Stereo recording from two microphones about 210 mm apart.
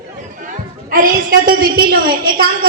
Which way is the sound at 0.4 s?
40° right (ahead or behind).